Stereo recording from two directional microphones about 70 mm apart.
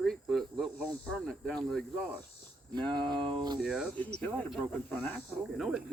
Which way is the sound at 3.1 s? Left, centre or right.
Right.